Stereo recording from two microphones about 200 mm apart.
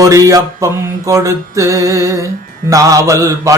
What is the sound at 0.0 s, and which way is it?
Mantra, 15° right (ahead or behind).